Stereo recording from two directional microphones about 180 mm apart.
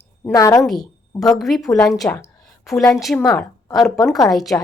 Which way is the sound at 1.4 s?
Centre (ahead or behind).